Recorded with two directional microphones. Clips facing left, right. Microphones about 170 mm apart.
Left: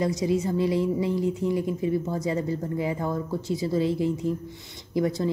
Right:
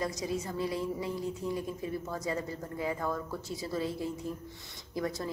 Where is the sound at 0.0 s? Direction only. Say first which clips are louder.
Left 9 dB; 25° left (ahead or behind).